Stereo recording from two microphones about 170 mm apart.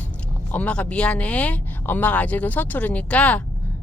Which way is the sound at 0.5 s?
5° left (ahead or behind).